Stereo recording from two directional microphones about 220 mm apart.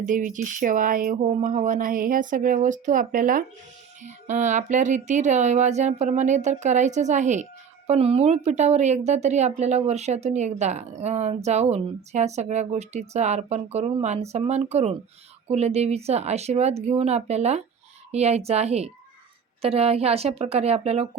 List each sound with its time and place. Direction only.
0.0 s a woman's voice: 35° right (ahead or behind)